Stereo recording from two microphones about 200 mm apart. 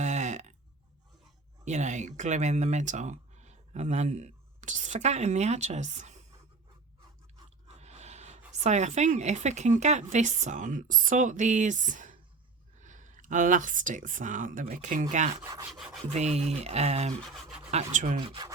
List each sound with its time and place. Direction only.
0.0 s a sound: 35° right (ahead or behind)
1.6 s speech: 35° right (ahead or behind)
7.8 s speech: 35° right (ahead or behind)
15.4 s rub: 15° right (ahead or behind)
15.7 s rub: centre (ahead or behind)
16.0 s speech: 35° right (ahead or behind)
17.2 s speech: centre (ahead or behind)
17.9 s speech: 40° right (ahead or behind)
18.2 s speech: 25° right (ahead or behind)